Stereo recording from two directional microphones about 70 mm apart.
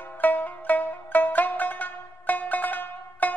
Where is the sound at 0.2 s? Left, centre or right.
Left.